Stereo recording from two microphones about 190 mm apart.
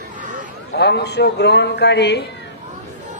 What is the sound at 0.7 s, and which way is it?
Speech, 60° left (ahead or behind).